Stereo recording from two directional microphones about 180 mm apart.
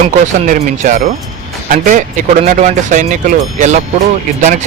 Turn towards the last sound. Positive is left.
turn(degrees=-40)  # may be behind; listen again after turning